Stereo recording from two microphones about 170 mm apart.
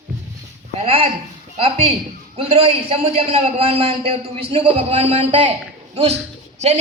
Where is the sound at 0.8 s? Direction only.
35° right (ahead or behind).